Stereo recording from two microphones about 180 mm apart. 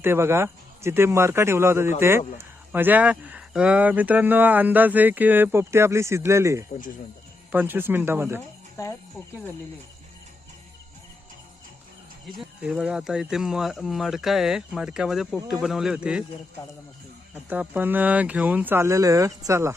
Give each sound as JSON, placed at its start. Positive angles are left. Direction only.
{"t": 0.0, "sound": "speech", "side_deg": -15}
{"t": 8.8, "sound": "speech", "side_deg": 15}
{"t": 12.4, "sound": "speech", "side_deg": -5}
{"t": 17.5, "sound": "speech", "side_deg": -10}